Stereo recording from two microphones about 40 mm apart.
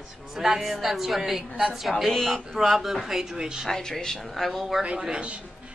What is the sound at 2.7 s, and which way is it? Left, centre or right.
Speech, centre.